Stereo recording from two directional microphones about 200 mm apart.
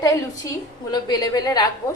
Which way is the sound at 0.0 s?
15° left (ahead or behind).